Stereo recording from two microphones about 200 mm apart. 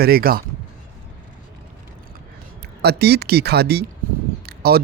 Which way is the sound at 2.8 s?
55° right (ahead or behind).